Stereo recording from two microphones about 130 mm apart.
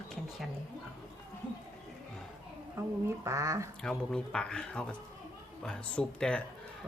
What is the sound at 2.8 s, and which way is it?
Speech, 20° right (ahead or behind).